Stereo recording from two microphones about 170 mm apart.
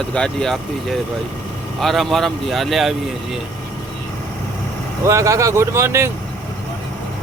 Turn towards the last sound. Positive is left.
turn(degrees=-15)  # may be behind; listen again after turning